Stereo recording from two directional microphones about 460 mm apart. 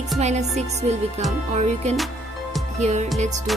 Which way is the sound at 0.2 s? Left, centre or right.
Centre.